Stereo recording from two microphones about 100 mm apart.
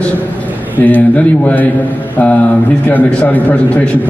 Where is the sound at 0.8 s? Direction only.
15° left (ahead or behind).